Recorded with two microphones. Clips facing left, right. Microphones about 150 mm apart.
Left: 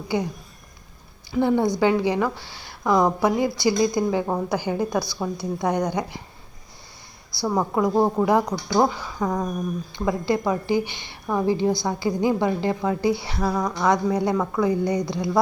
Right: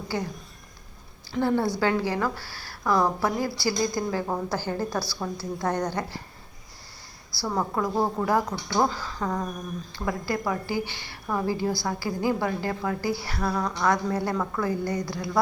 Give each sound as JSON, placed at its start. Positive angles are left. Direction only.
{"t": 0.1, "sound": "a woman's voice", "side_deg": 15}
{"t": 1.3, "sound": "a woman's voice", "side_deg": 15}
{"t": 7.3, "sound": "a woman's voice", "side_deg": 15}